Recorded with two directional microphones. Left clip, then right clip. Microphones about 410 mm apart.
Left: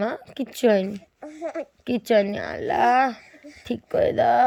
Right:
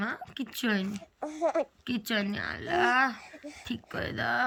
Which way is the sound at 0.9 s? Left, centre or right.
Centre.